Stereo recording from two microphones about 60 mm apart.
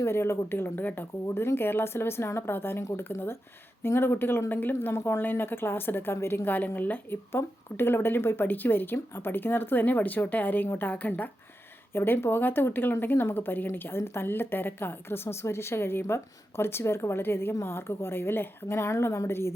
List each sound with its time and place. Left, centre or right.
0.0 s a woman's voice: left
1.3 s a woman's voice: left
11.9 s a woman's voice: left